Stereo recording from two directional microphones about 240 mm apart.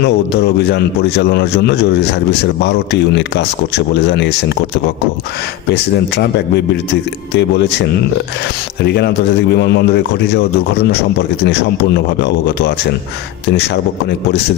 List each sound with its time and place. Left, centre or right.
0.0 s a man's voice: left
8.8 s a man's voice: left